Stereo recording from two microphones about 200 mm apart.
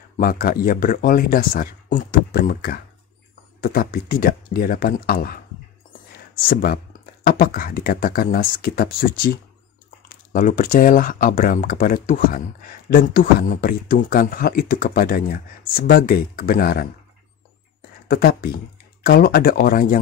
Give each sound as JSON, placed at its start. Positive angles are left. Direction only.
{"t": 0.2, "sound": "speech", "side_deg": 45}
{"t": 6.1, "sound": "a sound", "side_deg": 50}
{"t": 7.2, "sound": "speech", "side_deg": 45}
{"t": 18.0, "sound": "speech", "side_deg": 50}